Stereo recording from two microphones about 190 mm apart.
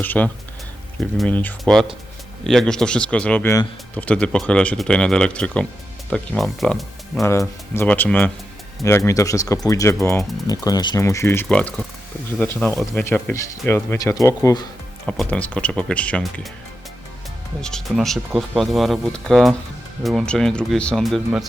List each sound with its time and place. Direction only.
0.0 s speech: 10° left (ahead or behind)
7.2 s speech: 15° left (ahead or behind)
11.4 s speech: 5° left (ahead or behind)
15.0 s speech: 5° left (ahead or behind)
17.6 s speech: 5° left (ahead or behind)